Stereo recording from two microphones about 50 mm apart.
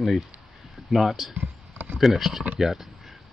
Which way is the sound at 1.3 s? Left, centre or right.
Right.